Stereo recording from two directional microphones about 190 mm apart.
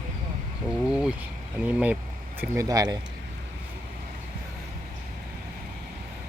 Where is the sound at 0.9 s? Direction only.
5° right (ahead or behind).